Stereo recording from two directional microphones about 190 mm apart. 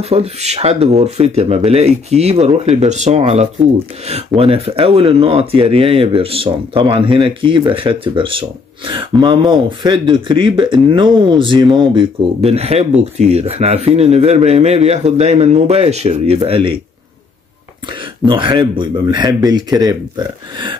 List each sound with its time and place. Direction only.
0.0 s speech: 35° right (ahead or behind)
18.2 s speech: 25° right (ahead or behind)